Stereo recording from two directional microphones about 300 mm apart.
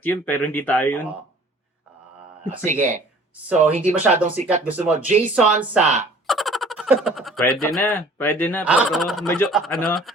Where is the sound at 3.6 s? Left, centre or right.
Right.